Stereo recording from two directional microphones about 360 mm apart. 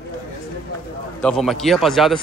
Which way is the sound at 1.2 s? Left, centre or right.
Centre.